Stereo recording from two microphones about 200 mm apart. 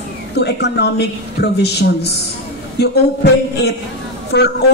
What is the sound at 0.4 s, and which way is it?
A woman's voice, 55° left (ahead or behind).